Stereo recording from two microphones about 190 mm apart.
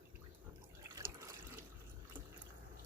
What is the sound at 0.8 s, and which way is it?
Water, 15° right (ahead or behind).